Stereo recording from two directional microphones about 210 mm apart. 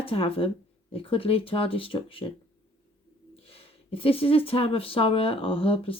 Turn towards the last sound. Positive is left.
turn(degrees=25)  # may be behind; listen again after turning